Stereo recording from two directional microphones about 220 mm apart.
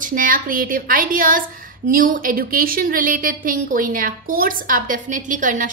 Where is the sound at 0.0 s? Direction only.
40° right (ahead or behind).